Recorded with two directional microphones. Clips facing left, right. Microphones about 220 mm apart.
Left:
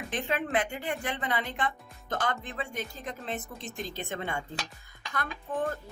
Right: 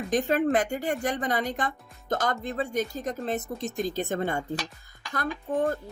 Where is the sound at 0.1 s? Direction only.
40° right (ahead or behind).